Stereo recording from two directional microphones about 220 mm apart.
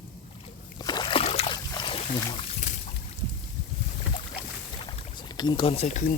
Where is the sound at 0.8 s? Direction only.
20° left (ahead or behind).